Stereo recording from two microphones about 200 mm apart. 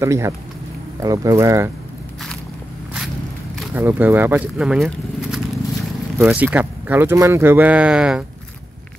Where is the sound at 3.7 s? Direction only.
10° right (ahead or behind).